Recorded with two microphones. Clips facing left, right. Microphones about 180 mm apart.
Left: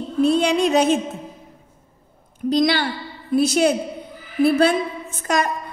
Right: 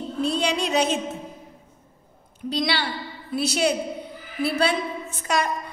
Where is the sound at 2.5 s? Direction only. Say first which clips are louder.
Left 7 dB; 50° left (ahead or behind).